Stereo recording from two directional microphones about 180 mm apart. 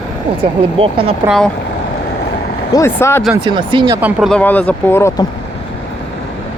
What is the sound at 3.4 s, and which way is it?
Speech, 25° right (ahead or behind).